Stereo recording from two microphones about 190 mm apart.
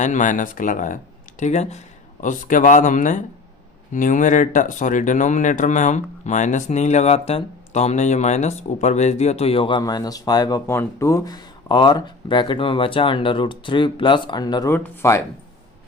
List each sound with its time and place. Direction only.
0.0 s speech: 40° left (ahead or behind); by 15.2 s 15° left (ahead or behind)